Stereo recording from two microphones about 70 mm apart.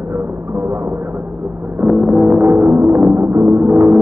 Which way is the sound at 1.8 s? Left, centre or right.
Centre.